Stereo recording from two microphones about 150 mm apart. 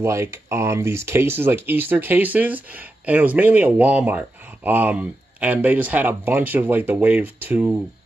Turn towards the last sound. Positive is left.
turn(degrees=-10)  # may be behind; listen again after turning